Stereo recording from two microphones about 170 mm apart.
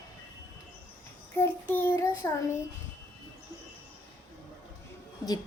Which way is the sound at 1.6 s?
10° left (ahead or behind).